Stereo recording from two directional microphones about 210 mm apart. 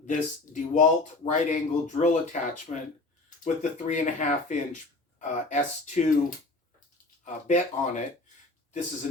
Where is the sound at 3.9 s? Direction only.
35° left (ahead or behind).